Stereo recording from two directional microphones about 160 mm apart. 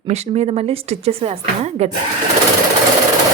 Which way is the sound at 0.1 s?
40° right (ahead or behind).